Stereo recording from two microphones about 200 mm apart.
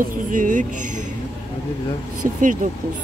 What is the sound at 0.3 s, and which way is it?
Speech, 40° right (ahead or behind).